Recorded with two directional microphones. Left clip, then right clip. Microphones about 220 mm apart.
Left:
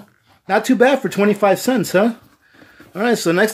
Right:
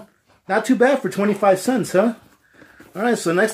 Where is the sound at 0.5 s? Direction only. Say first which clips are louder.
Left 3 dB; 40° left (ahead or behind).